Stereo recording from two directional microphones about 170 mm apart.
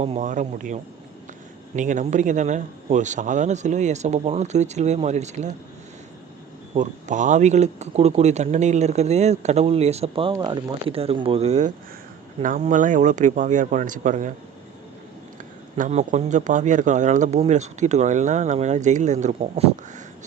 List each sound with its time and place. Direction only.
0.0 s a man's voice: 40° right (ahead or behind)
6.7 s a man's voice: 45° right (ahead or behind)
15.8 s a man's voice: 45° right (ahead or behind)